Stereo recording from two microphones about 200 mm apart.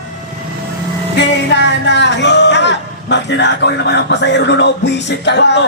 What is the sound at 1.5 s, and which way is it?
A man's voice, 60° left (ahead or behind).